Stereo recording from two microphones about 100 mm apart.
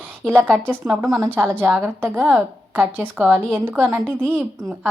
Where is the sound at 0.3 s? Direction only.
20° right (ahead or behind).